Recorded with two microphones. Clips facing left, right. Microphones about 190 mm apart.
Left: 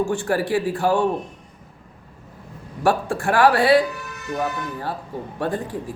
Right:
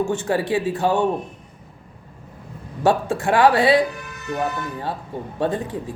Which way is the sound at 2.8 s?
20° right (ahead or behind).